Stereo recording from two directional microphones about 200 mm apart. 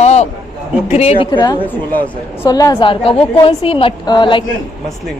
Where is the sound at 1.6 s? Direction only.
10° left (ahead or behind).